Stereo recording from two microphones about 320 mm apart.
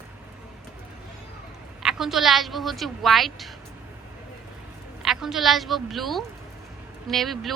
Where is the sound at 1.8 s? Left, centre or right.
Centre.